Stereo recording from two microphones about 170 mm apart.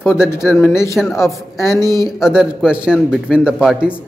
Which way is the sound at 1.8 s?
20° right (ahead or behind).